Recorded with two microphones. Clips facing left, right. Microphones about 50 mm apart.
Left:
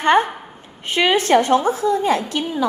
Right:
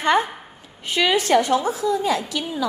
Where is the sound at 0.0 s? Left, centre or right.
Left.